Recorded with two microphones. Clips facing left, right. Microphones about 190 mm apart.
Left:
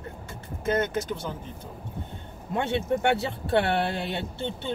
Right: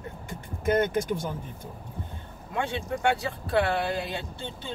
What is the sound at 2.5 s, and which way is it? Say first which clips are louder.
Speech: left 4 dB; 25° left (ahead or behind).